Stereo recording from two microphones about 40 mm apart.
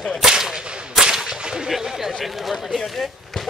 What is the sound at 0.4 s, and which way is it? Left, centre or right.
Gunshot, centre.